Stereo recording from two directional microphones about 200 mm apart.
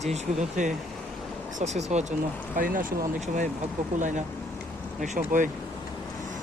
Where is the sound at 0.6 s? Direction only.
35° right (ahead or behind).